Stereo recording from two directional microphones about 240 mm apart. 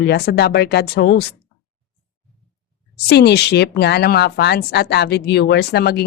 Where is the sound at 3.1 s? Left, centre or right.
Left.